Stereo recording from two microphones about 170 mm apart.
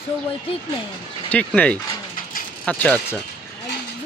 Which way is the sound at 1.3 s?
5° left (ahead or behind).